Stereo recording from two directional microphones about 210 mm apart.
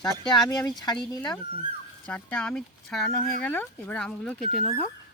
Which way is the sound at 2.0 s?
5° left (ahead or behind).